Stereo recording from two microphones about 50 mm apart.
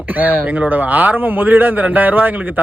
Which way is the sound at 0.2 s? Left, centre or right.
Right.